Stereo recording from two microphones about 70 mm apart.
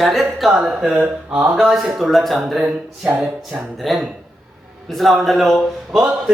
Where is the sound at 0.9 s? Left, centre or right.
Centre.